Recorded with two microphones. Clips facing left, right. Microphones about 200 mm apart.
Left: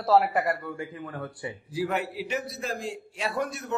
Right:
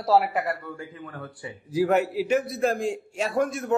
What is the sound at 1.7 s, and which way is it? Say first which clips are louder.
A man's voice: right 8 dB; 45° right (ahead or behind).